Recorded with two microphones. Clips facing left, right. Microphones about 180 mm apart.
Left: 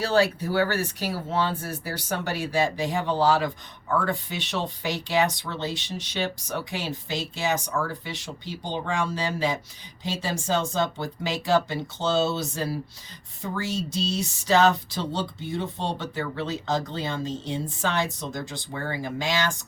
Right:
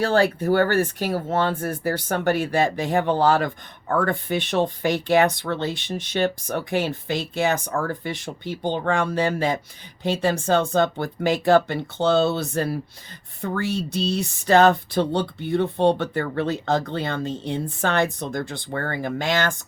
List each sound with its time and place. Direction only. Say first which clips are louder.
0.0 s speech: right 3 dB; 55° right (ahead or behind)